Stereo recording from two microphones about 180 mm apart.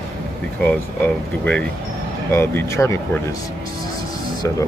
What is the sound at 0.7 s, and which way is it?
Speech, 10° left (ahead or behind).